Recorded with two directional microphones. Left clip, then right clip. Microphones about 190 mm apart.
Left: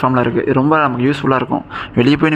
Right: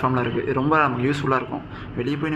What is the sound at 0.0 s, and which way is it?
A man's voice, 45° left (ahead or behind).